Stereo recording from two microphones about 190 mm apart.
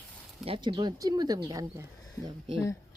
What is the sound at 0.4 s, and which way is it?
Speech, 25° right (ahead or behind).